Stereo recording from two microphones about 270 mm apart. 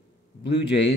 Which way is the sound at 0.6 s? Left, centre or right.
Left.